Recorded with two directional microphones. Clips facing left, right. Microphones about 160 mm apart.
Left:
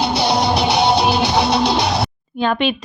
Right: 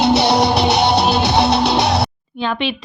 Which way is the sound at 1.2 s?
70° right (ahead or behind).